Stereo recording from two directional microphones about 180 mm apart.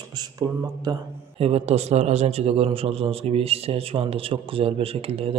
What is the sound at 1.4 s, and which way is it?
A man's voice, 35° right (ahead or behind).